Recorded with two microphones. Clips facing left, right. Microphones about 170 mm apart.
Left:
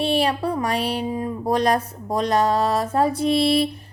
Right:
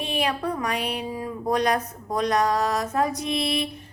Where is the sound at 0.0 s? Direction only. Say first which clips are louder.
Left 5 dB; 30° left (ahead or behind).